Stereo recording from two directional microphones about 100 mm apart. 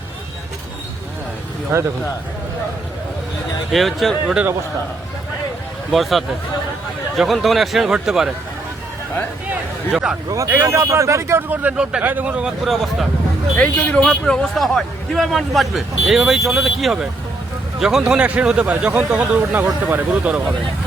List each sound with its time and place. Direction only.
1.7 s speech: 25° right (ahead or behind)
3.7 s a man's voice: centre (ahead or behind)
5.9 s a man's voice: centre (ahead or behind)
9.9 s speech: 5° right (ahead or behind)
10.2 s a man's voice: 35° right (ahead or behind); by 13.1 s centre (ahead or behind)
13.6 s a man's voice: 15° left (ahead or behind); by 20.4 s 15° right (ahead or behind)